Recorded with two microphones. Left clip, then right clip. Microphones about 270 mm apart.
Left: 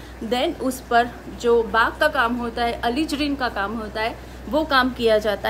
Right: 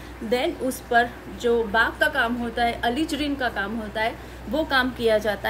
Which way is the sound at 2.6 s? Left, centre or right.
Centre.